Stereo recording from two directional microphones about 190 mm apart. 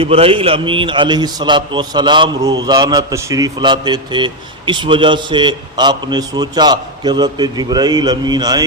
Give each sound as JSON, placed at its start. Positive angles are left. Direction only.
{"t": 0.0, "sound": "a man's voice", "side_deg": -30}